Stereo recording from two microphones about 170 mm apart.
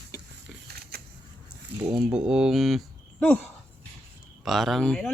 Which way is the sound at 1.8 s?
5° right (ahead or behind).